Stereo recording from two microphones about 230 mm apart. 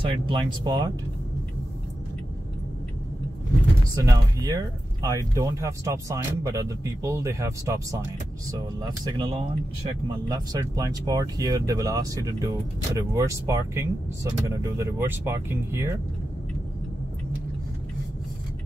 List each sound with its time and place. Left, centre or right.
0.1 s speech: right
3.9 s speech: centre